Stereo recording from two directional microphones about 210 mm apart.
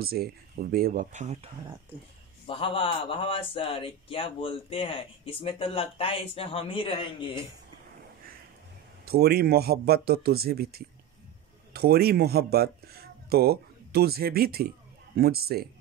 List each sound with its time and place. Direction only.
0.0 s speech: 45° right (ahead or behind)
2.4 s speech: 25° left (ahead or behind)
9.0 s speech: 50° right (ahead or behind)